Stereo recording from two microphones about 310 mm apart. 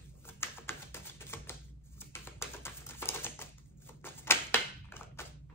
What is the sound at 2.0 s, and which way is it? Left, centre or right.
Typewriter, centre.